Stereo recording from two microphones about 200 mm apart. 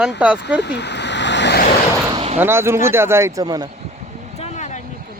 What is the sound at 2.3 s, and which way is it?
Speech, 10° right (ahead or behind).